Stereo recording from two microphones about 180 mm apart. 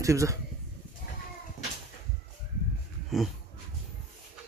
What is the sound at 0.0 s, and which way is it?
Speech, 15° right (ahead or behind).